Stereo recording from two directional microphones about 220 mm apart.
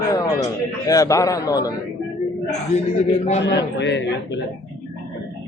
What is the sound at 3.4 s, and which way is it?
Speech, 50° left (ahead or behind).